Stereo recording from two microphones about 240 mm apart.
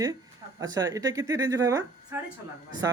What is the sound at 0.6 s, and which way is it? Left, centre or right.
Speech, centre.